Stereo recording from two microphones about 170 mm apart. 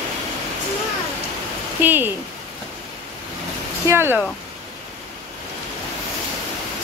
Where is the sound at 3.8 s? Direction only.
15° right (ahead or behind).